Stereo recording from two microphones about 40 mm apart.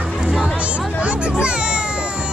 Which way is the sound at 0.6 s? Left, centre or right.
Right.